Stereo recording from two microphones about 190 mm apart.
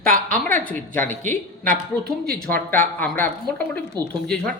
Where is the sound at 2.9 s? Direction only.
10° left (ahead or behind).